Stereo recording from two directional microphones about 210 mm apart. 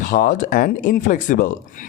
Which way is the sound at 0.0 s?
40° left (ahead or behind).